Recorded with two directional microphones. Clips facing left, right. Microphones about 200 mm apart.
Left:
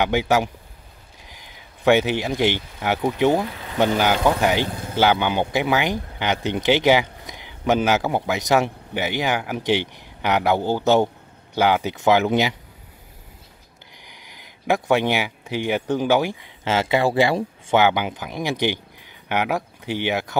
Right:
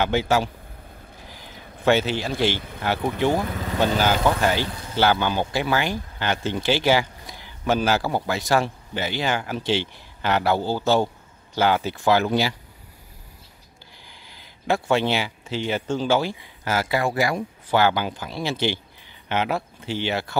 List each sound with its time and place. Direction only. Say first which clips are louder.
0.0 s speech: left 2 dB; 15° left (ahead or behind)
1.9 s speech: left 3 dB; 15° left (ahead or behind)
4.6 s vehicle: left 4 dB; 55° left (ahead or behind)
4.9 s speech: left 2 dB; 15° left (ahead or behind)
14.0 s speech: left 3 dB; 15° left (ahead or behind)